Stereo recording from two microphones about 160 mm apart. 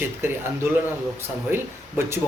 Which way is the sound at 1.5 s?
15° right (ahead or behind).